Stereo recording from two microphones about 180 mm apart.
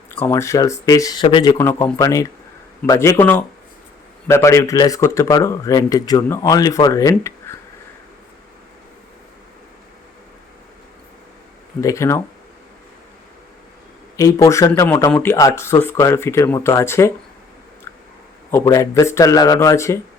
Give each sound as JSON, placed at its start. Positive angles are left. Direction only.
{"t": 0.1, "sound": "speech", "side_deg": 15}
{"t": 11.8, "sound": "speech", "side_deg": 15}
{"t": 14.2, "sound": "speech", "side_deg": 20}
{"t": 18.5, "sound": "speech", "side_deg": 15}